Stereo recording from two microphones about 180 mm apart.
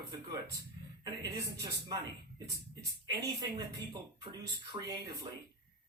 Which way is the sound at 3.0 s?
20° right (ahead or behind).